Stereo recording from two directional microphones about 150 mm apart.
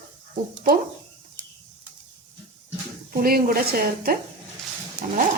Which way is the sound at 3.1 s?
80° right.